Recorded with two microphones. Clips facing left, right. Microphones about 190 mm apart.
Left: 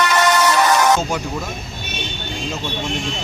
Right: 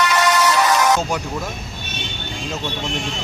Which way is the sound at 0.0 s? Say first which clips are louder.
Left 1 dB; 50° left (ahead or behind).